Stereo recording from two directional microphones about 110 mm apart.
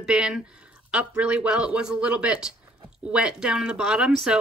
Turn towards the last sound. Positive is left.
turn(degrees=-5)  # may be behind; listen again after turning